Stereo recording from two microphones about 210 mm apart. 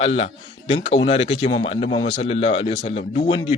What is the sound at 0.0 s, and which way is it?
Speech, 30° left (ahead or behind).